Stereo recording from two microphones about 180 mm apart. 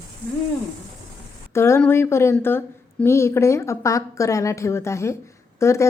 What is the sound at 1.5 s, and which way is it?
A woman's voice, 15° left (ahead or behind).